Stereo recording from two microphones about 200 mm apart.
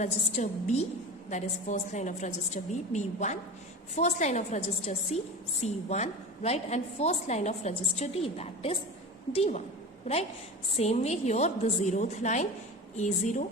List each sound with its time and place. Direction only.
0.0 s a woman's voice: 35° left (ahead or behind)